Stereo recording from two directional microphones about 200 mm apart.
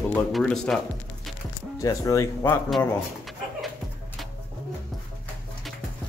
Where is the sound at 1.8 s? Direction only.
15° left (ahead or behind).